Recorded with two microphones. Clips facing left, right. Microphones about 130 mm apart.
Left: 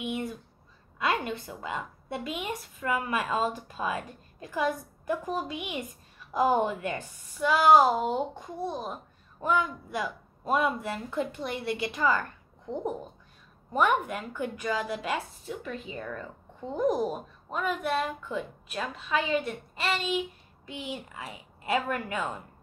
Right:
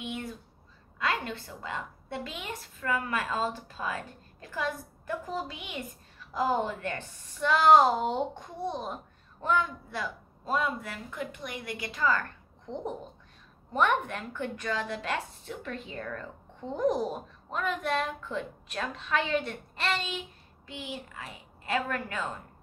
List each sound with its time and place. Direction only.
0.9 s a woman's voice: 15° left (ahead or behind)
13.7 s a woman's voice: 10° left (ahead or behind)